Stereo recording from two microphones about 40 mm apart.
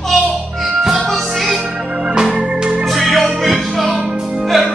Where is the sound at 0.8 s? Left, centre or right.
Centre.